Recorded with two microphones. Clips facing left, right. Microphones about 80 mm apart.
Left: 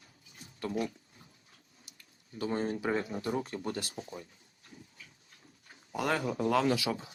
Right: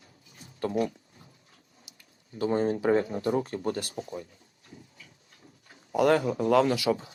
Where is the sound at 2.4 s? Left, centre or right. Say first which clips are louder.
Right 7 dB; right.